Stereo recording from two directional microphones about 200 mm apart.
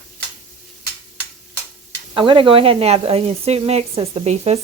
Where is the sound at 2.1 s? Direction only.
25° right (ahead or behind).